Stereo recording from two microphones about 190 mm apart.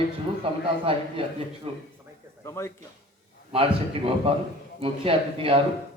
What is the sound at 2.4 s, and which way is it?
Speech, 15° left (ahead or behind).